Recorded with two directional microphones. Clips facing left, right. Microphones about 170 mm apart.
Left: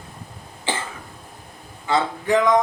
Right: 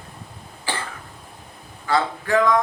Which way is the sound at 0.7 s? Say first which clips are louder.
Left 2 dB; 20° left (ahead or behind).